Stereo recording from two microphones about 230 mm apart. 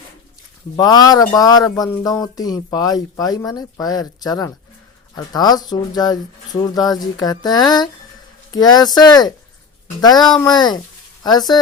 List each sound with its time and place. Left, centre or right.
0.8 s speech: centre